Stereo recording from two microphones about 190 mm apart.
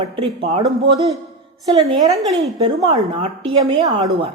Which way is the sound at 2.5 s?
35° right (ahead or behind).